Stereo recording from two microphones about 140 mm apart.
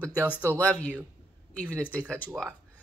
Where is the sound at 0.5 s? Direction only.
10° left (ahead or behind).